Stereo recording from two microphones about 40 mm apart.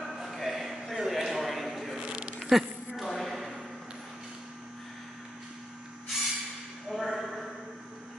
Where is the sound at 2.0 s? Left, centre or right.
Right.